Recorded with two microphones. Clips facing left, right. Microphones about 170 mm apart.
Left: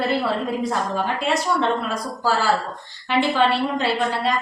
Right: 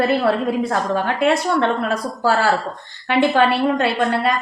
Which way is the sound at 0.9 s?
60° right (ahead or behind).